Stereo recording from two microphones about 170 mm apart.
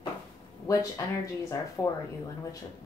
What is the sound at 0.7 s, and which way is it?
A woman's voice, 20° left (ahead or behind).